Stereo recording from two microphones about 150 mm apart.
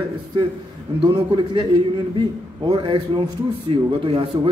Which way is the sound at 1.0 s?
30° right (ahead or behind).